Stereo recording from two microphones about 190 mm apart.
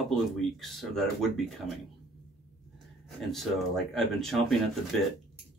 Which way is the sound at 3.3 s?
Centre (ahead or behind).